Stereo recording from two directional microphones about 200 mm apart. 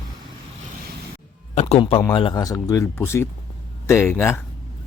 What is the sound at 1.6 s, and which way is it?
Speech, 30° left (ahead or behind).